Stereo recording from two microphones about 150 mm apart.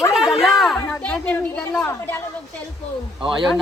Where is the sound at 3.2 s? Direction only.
35° right (ahead or behind).